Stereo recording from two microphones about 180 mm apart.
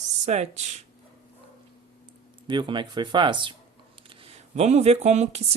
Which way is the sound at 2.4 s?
25° right (ahead or behind).